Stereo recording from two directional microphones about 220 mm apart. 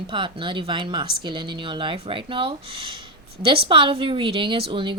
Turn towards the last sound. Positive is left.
turn(degrees=-25)  # may be behind; listen again after turning